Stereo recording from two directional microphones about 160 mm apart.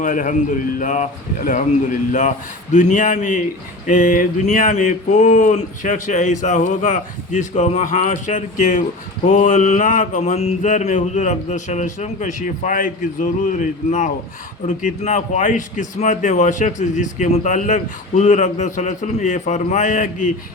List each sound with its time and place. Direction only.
0.0 s a man's voice: 55° left (ahead or behind)